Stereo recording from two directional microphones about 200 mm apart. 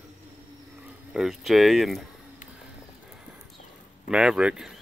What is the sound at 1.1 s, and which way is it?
Speech, centre (ahead or behind).